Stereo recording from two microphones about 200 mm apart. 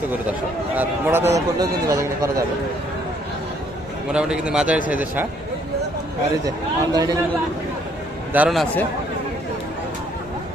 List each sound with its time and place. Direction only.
0.8 s a man's voice: 10° right (ahead or behind)
4.1 s a man's voice: 5° right (ahead or behind)
6.9 s speech: 20° right (ahead or behind)
8.3 s a man's voice: 5° right (ahead or behind)